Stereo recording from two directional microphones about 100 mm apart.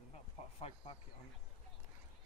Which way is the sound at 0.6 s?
70° left (ahead or behind).